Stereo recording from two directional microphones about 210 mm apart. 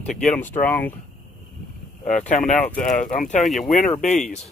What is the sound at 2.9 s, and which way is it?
Speech, 35° left (ahead or behind).